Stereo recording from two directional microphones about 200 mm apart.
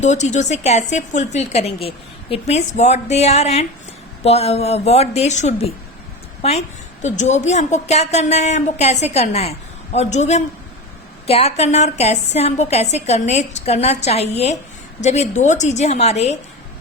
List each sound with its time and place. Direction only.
0.0 s a woman's voice: 35° left (ahead or behind)